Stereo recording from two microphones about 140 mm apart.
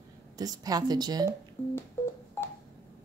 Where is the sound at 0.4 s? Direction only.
25° right (ahead or behind).